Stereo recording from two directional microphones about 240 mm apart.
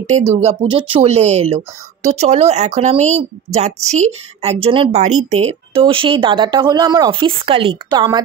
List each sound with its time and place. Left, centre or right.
0.2 s speech: right